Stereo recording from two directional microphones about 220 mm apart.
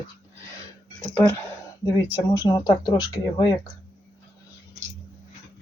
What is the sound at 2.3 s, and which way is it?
Speech, 20° left (ahead or behind).